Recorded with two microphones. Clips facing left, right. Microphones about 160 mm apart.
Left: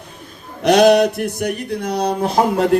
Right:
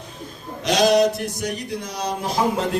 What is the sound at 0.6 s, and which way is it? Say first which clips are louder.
Speech: left 5 dB; 60° left (ahead or behind).